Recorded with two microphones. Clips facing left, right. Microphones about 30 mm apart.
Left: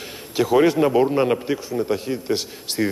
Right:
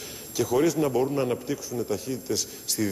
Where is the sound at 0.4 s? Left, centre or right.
Left.